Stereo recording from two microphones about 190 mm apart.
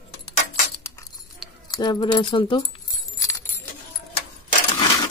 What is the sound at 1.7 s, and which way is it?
Speech, 20° left (ahead or behind).